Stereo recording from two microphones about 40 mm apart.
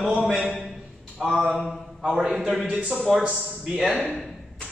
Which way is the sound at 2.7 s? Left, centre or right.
Right.